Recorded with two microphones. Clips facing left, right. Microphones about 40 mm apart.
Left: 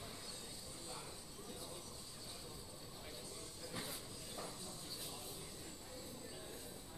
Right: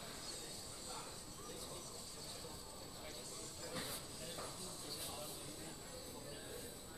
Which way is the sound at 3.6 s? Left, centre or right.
Centre.